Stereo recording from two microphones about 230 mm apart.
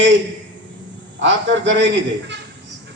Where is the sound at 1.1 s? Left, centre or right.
Right.